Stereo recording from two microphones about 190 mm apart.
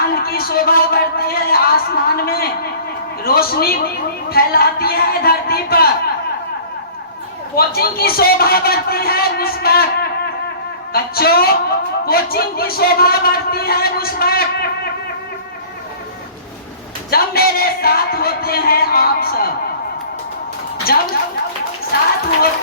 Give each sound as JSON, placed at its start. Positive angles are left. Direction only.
{"t": 0.1, "sound": "a sound", "side_deg": 55}
{"t": 3.2, "sound": "a man's voice", "side_deg": 55}
{"t": 7.5, "sound": "a man's voice", "side_deg": 55}
{"t": 17.1, "sound": "a man's voice", "side_deg": 55}
{"t": 20.8, "sound": "a man's voice", "side_deg": 55}